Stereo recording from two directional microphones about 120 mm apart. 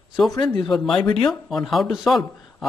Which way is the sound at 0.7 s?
Centre (ahead or behind).